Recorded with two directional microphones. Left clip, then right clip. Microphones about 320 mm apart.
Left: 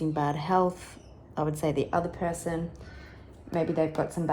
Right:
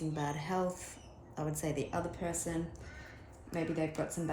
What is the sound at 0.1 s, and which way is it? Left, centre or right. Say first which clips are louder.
Speech: left 12 dB; left.